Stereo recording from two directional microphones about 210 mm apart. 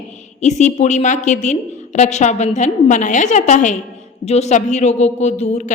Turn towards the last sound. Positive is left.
turn(degrees=35)  # may be behind; listen again after turning